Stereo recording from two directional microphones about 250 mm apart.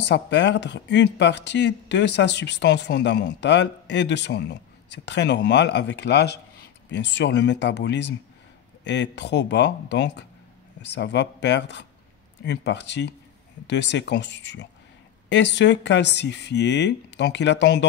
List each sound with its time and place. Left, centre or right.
0.0 s speech: left